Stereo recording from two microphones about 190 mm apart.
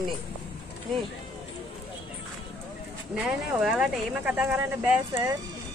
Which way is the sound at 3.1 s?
5° right (ahead or behind).